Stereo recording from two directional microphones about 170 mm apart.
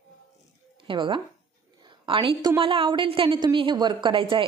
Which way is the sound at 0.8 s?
30° right (ahead or behind).